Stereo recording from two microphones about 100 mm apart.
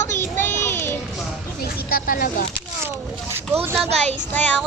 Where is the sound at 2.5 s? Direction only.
20° right (ahead or behind).